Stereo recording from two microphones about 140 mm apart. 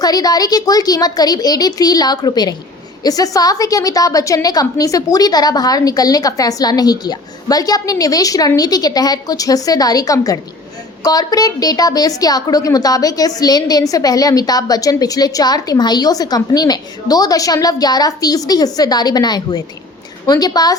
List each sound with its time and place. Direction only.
0.0 s a woman's voice: 25° left (ahead or behind)